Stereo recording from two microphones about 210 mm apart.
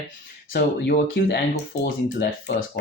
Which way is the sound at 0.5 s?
50° left (ahead or behind).